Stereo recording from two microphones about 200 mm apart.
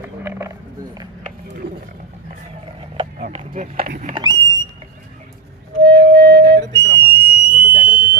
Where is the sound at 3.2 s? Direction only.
45° right (ahead or behind).